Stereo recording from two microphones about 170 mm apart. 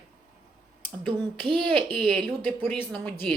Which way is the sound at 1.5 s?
30° right (ahead or behind).